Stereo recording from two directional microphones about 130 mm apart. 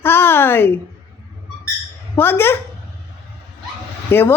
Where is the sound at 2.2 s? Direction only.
15° left (ahead or behind).